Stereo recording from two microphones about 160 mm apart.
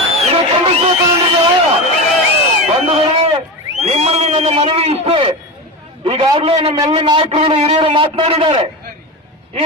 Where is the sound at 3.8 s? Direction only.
40° right (ahead or behind).